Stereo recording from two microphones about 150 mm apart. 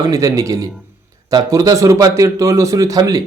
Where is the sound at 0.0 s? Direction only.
20° right (ahead or behind).